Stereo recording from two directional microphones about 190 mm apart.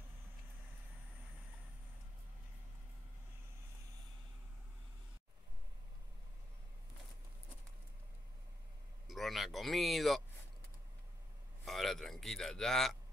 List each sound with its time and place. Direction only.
9.0 s speech: centre (ahead or behind)
11.6 s speech: centre (ahead or behind)